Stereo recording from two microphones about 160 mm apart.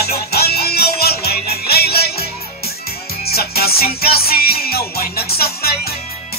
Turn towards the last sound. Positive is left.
turn(degrees=75)  # may be behind; listen again after turning